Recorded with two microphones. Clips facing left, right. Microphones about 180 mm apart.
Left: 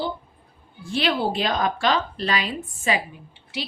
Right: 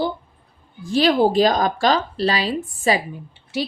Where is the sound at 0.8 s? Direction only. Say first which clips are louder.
Right 7 dB; 40° right (ahead or behind).